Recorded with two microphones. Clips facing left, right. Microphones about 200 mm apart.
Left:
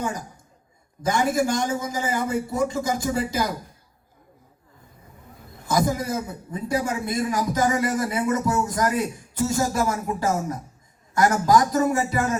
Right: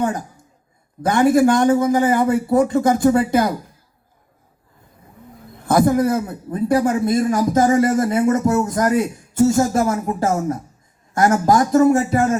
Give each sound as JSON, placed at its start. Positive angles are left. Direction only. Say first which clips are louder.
{"t": 1.0, "sound": "a man's voice", "louder": "right 8 dB", "side_deg": -55}
{"t": 5.6, "sound": "a man's voice", "louder": "right 8 dB", "side_deg": -55}